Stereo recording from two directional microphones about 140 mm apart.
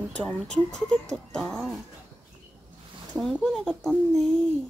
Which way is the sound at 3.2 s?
Centre (ahead or behind).